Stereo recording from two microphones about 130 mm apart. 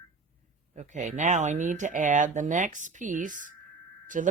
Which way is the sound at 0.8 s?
70° right (ahead or behind).